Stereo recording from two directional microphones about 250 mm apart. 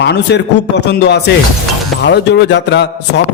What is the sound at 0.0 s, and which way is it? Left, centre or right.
A man's voice, left.